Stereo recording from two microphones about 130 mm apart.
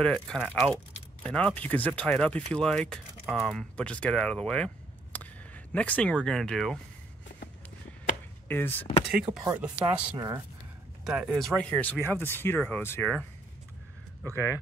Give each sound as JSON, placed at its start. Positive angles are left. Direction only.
{"t": 0.0, "sound": "speech", "side_deg": 5}
{"t": 8.5, "sound": "speech", "side_deg": 15}
{"t": 9.3, "sound": "a woman's voice", "side_deg": -20}
{"t": 9.8, "sound": "speech", "side_deg": -10}
{"t": 10.1, "sound": "a woman's voice", "side_deg": -30}
{"t": 11.1, "sound": "speech", "side_deg": -5}
{"t": 14.2, "sound": "speech", "side_deg": 20}